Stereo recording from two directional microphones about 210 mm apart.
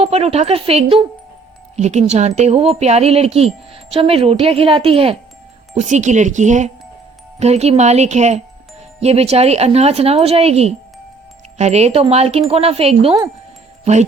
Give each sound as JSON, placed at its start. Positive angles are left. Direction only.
{"t": 0.0, "sound": "speech", "side_deg": -30}